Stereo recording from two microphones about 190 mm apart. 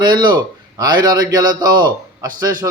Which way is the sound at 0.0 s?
25° right (ahead or behind).